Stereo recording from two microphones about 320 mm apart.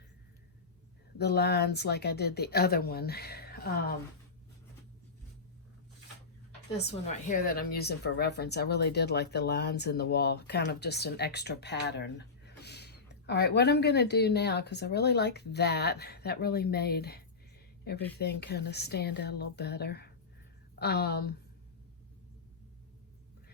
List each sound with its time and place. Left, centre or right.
1.2 s speech: left
6.7 s a woman's voice: left